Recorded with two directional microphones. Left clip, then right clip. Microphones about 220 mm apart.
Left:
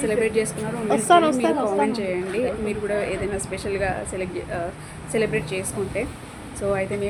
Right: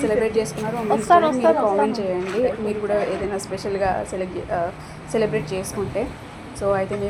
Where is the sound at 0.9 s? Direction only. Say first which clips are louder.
Right 1 dB; 45° left (ahead or behind).